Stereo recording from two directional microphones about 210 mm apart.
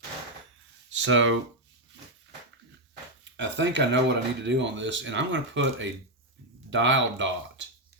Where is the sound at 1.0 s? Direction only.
65° right (ahead or behind).